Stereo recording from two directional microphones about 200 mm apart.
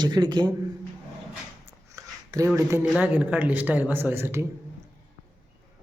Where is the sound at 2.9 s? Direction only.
10° right (ahead or behind).